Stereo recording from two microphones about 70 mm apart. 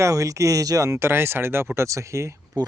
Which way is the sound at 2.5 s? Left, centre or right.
Right.